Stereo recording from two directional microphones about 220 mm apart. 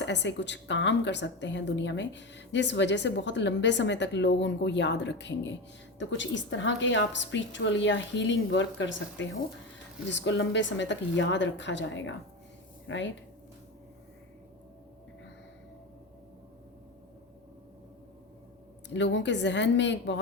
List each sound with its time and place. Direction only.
0.0 s a woman's voice: 50° left (ahead or behind)
18.9 s a woman's voice: 55° left (ahead or behind)